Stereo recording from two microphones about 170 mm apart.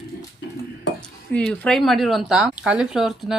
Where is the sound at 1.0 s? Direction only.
5° left (ahead or behind).